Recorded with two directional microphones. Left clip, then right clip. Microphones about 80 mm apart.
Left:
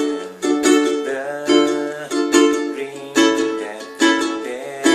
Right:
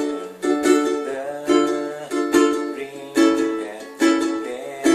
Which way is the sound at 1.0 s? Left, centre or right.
Centre.